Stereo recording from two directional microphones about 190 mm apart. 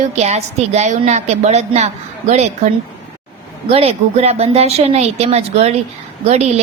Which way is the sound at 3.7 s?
30° right (ahead or behind).